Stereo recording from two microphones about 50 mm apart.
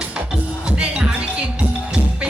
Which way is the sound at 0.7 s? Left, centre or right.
Centre.